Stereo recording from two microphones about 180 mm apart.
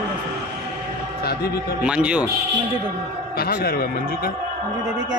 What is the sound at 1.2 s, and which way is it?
Music, 60° left (ahead or behind).